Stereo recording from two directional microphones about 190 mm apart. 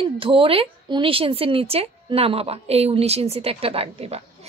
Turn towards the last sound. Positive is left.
turn(degrees=-30)  # may be behind; listen again after turning